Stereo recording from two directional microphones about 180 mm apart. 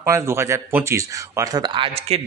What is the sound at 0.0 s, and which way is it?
Speech, 15° right (ahead or behind).